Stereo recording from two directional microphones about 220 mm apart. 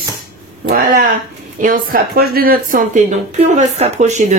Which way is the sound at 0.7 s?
40° right (ahead or behind).